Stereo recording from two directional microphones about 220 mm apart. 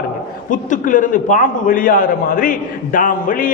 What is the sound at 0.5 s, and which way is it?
A man's voice, 35° left (ahead or behind).